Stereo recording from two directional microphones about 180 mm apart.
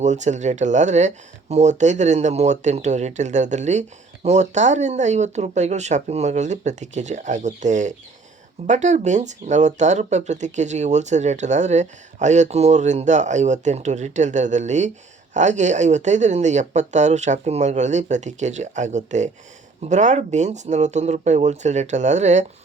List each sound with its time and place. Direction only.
0.0 s speech: 40° right (ahead or behind)